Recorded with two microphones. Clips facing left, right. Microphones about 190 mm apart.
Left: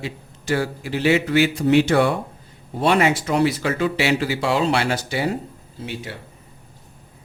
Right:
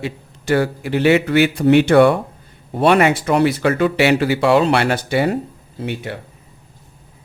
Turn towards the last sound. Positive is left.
turn(degrees=-60)  # may be behind; listen again after turning